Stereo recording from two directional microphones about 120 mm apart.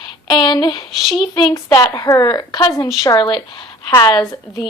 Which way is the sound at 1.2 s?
35° left (ahead or behind).